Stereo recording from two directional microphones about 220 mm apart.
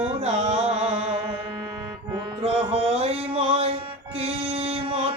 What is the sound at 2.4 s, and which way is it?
Music, 25° right (ahead or behind).